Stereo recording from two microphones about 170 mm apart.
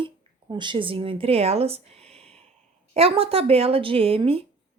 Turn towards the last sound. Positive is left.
turn(degrees=-35)  # may be behind; listen again after turning